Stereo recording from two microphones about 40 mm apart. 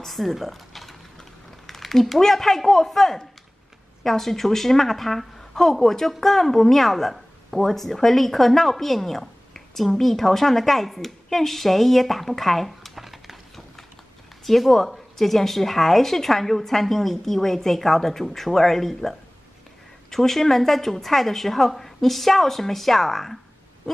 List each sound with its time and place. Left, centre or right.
0.0 s speech: centre
14.4 s speech: centre